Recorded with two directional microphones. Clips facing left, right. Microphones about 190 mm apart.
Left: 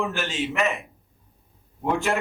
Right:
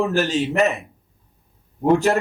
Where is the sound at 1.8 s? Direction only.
40° right (ahead or behind).